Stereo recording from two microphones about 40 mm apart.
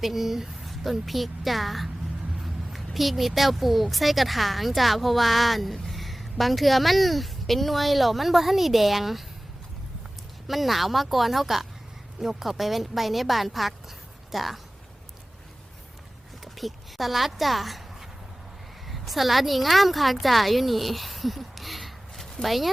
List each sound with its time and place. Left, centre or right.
0.0 s speech: centre
10.4 s speech: centre
16.4 s speech: centre
18.9 s speech: centre